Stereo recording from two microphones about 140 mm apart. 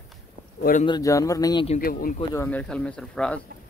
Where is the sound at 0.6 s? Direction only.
90° left.